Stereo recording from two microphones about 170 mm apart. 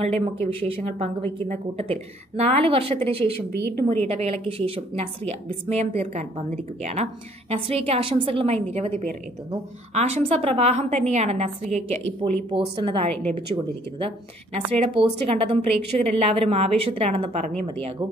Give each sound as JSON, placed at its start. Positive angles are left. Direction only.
{"t": 0.0, "sound": "a woman's voice", "side_deg": -35}
{"t": 9.9, "sound": "a woman's voice", "side_deg": -40}
{"t": 12.2, "sound": "a woman's voice", "side_deg": -30}
{"t": 14.8, "sound": "a woman's voice", "side_deg": -35}